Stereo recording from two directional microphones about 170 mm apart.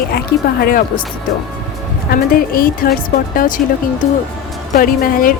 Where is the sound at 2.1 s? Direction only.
60° left (ahead or behind).